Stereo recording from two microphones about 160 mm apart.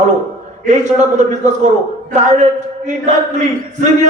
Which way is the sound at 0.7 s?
45° right (ahead or behind).